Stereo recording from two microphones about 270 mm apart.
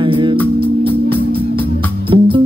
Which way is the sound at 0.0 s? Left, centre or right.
Centre.